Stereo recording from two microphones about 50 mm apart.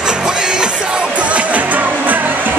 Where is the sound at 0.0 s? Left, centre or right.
Centre.